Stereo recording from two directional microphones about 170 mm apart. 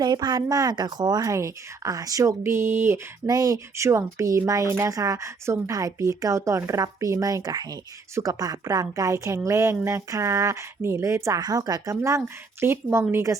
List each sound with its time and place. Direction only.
0.0 s speech: 25° right (ahead or behind)